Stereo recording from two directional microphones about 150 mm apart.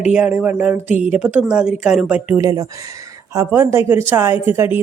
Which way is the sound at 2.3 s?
20° right (ahead or behind).